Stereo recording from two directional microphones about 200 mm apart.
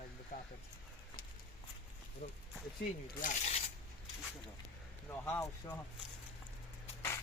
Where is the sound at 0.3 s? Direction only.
40° left (ahead or behind).